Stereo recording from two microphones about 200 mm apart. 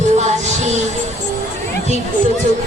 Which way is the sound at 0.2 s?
35° right (ahead or behind).